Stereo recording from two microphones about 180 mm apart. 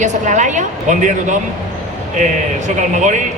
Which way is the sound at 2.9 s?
40° right (ahead or behind).